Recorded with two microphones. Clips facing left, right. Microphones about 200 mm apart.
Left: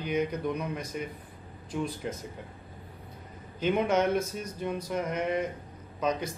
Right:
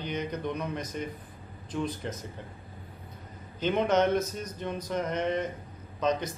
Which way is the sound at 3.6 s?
10° left (ahead or behind).